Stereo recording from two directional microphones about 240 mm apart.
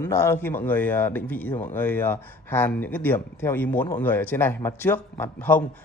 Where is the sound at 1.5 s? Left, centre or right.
Left.